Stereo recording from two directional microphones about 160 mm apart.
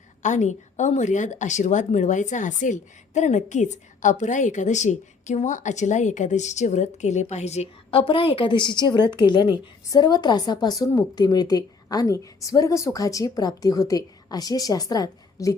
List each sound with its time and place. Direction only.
0.2 s a woman's voice: 50° left (ahead or behind); by 15.5 s 20° left (ahead or behind)